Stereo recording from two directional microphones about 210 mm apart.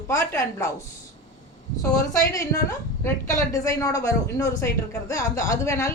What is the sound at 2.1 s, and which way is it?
A woman's voice, 15° left (ahead or behind).